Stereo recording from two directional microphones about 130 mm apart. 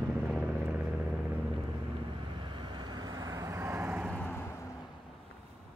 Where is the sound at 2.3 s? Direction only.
40° right (ahead or behind); by 4.2 s 10° right (ahead or behind).